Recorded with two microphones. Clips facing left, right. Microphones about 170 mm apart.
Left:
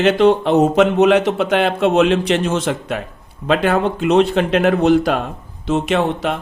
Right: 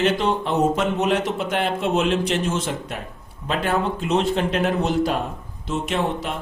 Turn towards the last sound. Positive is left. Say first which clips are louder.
# left 6 dB
turn(degrees=80)